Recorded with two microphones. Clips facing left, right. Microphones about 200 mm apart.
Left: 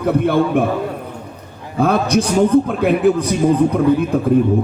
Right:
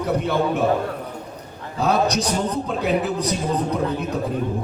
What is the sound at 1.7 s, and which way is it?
A man's voice, 55° left (ahead or behind).